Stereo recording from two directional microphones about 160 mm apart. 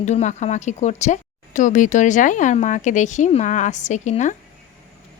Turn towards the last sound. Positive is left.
turn(degrees=50)  # may be behind; listen again after turning